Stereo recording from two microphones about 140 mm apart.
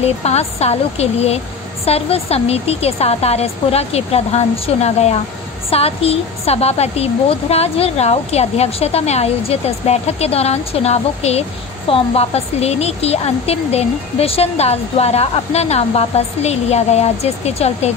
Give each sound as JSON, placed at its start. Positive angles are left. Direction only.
{"t": 0.0, "sound": "a woman's voice", "side_deg": 50}